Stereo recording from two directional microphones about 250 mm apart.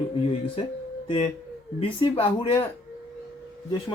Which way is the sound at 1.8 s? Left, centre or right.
Left.